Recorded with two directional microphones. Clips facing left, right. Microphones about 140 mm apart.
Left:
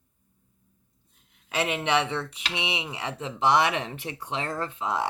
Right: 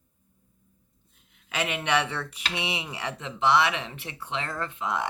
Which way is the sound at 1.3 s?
35° left (ahead or behind).